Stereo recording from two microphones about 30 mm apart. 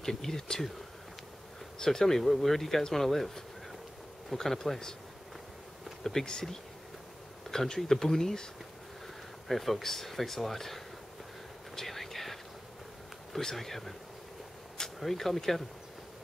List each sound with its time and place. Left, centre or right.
0.0 s speech: centre
1.9 s speech: centre
6.0 s speech: centre
7.4 s speech: centre
9.5 s speech: centre
11.7 s whispering: centre
13.4 s speech: centre
15.0 s speech: centre